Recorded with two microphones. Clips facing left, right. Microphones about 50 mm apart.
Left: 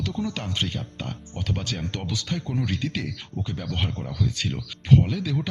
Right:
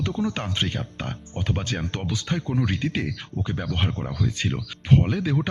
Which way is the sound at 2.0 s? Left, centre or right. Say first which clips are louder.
Right 2 dB; centre.